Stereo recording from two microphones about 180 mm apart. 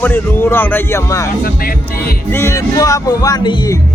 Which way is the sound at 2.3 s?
15° left (ahead or behind).